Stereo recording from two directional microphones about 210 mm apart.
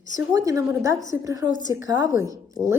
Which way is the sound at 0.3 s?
15° right (ahead or behind).